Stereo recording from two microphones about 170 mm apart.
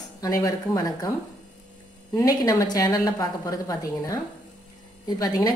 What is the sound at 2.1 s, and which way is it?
A woman's voice, 20° left (ahead or behind).